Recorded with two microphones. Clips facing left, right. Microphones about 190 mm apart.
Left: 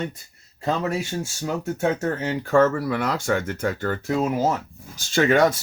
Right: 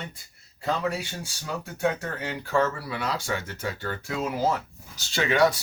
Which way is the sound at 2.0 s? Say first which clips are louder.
Left 8 dB; 45° left (ahead or behind).